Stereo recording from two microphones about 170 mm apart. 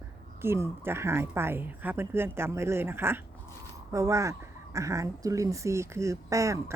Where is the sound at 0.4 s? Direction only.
15° right (ahead or behind).